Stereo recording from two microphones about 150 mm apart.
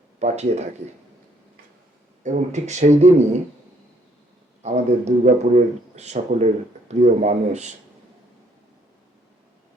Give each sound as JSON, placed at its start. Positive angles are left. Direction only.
{"t": 0.2, "sound": "speech", "side_deg": -50}
{"t": 2.2, "sound": "speech", "side_deg": -50}
{"t": 4.6, "sound": "speech", "side_deg": -50}